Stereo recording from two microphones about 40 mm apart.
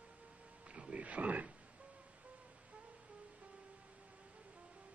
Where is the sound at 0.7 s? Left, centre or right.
Right.